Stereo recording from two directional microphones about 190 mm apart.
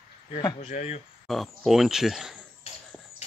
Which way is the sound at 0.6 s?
35° left (ahead or behind).